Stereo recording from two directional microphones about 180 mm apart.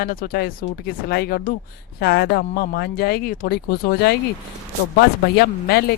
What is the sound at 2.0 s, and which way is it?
Speech, 65° left (ahead or behind).